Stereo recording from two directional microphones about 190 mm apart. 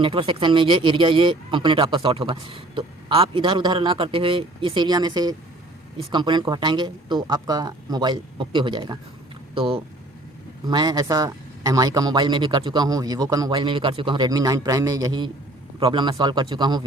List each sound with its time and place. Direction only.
0.0 s speech: 25° right (ahead or behind)